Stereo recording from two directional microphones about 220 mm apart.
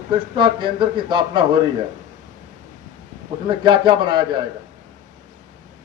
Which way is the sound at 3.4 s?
20° right (ahead or behind).